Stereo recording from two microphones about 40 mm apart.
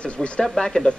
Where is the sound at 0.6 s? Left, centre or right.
Centre.